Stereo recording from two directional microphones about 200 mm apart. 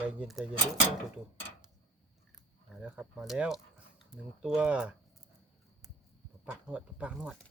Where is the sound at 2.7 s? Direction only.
5° right (ahead or behind).